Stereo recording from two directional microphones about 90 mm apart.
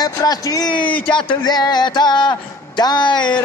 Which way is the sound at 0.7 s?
65° left (ahead or behind).